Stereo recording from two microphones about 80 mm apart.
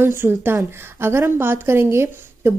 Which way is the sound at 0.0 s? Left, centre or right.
Right.